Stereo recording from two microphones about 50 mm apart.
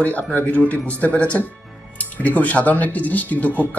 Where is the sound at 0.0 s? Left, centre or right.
Left.